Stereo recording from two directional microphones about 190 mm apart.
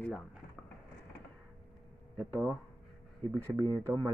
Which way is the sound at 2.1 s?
15° right (ahead or behind).